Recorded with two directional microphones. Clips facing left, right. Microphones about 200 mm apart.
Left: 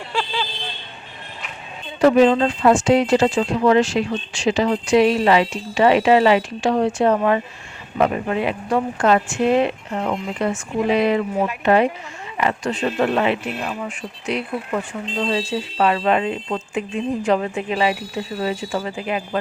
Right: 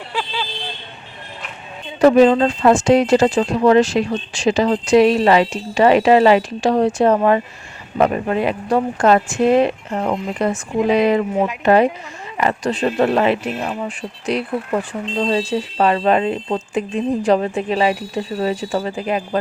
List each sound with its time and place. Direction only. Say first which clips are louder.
0.1 s vehicle: left 1 dB; 15° right (ahead or behind)
2.0 s speech: right 3 dB; 40° right (ahead or behind)
10.7 s speech: right 3 dB; 15° right (ahead or behind)
11.6 s speech: right 3 dB; 40° right (ahead or behind)